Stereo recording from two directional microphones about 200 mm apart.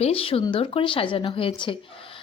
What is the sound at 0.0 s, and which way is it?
Speech, 30° left (ahead or behind).